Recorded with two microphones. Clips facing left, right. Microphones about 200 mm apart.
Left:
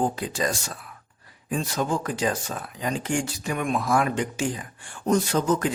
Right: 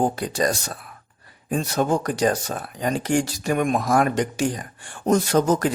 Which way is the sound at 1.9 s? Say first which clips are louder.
Right 6 dB; 40° right (ahead or behind).